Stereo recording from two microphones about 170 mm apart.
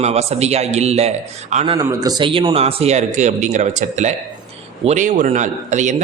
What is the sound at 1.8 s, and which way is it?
A man's voice, 20° right (ahead or behind).